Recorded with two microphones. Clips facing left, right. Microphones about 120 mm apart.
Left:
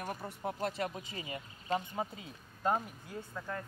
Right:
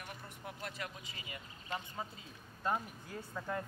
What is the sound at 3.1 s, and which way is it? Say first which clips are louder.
Speech: left 1 dB; 5° right (ahead or behind).